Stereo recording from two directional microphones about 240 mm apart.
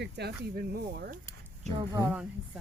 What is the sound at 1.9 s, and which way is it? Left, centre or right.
Speech, centre.